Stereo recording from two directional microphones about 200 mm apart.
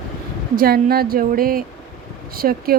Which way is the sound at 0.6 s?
50° right (ahead or behind).